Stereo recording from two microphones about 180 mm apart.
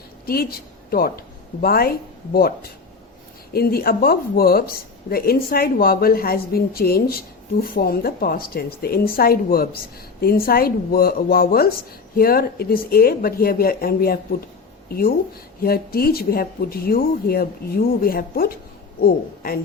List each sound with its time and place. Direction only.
0.3 s a woman's voice: 55° left (ahead or behind)
3.5 s speech: 55° left (ahead or behind)
15.6 s speech: 55° left (ahead or behind)